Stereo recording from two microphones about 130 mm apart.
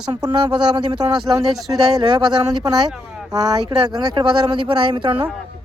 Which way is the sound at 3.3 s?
30° right (ahead or behind).